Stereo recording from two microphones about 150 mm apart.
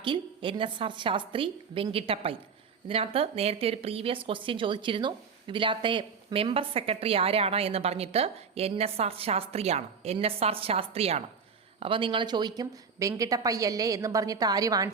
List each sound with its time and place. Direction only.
0.0 s a woman's voice: 35° right (ahead or behind)